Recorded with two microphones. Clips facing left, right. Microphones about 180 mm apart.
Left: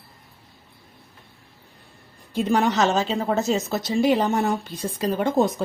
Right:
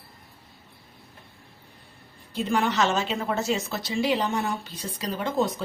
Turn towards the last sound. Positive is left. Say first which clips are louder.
# left 5 dB
turn(degrees=50)  # may be behind; listen again after turning